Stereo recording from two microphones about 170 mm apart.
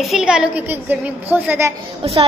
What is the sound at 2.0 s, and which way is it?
Speech, 35° right (ahead or behind).